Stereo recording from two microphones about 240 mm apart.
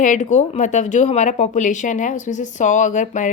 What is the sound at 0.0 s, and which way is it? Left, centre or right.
A woman's voice, left.